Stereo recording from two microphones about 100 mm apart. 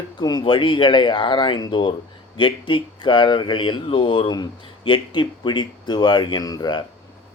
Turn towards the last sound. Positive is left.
turn(degrees=45)  # may be behind; listen again after turning